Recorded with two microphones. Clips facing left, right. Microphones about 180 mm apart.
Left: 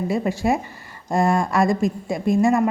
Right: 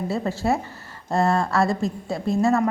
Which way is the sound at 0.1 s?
15° left (ahead or behind).